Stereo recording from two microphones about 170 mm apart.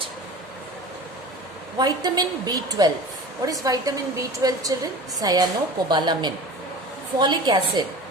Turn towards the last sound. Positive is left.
turn(degrees=-25)  # may be behind; listen again after turning